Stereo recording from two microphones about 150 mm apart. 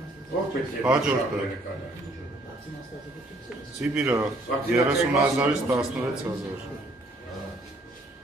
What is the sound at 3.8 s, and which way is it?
Speech, 10° right (ahead or behind).